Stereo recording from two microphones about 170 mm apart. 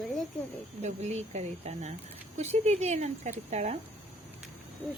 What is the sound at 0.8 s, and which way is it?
Speech, 40° right (ahead or behind).